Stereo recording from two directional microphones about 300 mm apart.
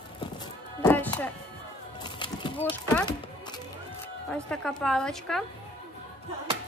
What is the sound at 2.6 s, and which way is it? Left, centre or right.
Speech, centre.